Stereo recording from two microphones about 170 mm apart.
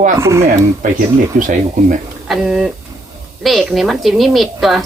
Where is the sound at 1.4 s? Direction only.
50° right (ahead or behind).